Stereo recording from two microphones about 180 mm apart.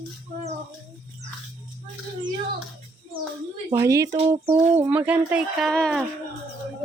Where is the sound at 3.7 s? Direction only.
15° right (ahead or behind); by 6.0 s centre (ahead or behind).